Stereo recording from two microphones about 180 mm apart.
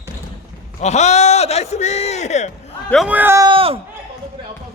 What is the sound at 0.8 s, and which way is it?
A man's voice, 40° left (ahead or behind).